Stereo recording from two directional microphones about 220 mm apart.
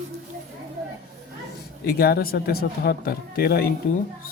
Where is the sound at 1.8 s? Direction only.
45° left (ahead or behind).